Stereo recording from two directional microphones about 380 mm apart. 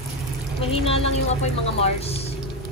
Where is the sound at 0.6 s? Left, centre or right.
Centre.